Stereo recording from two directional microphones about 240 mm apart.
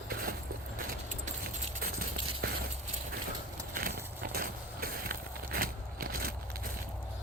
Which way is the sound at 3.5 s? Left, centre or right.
Right.